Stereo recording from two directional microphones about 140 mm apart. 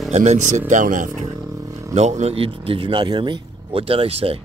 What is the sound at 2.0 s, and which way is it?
Speech, 55° right (ahead or behind).